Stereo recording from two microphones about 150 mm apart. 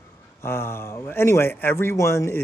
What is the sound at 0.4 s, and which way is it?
Speech, 15° left (ahead or behind).